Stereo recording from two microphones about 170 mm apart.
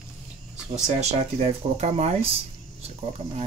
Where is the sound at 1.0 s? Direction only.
40° right (ahead or behind).